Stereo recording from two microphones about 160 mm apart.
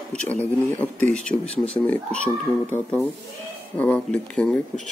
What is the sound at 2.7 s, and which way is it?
Speech, 10° left (ahead or behind).